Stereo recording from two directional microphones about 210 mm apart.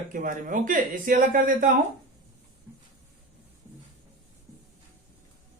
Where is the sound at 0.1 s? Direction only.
40° right (ahead or behind).